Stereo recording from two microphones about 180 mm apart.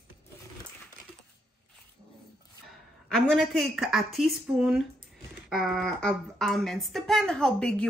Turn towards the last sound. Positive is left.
turn(degrees=5)  # may be behind; listen again after turning